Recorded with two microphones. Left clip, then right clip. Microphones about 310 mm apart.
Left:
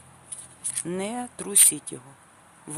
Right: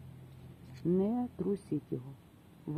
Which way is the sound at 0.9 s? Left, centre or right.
Left.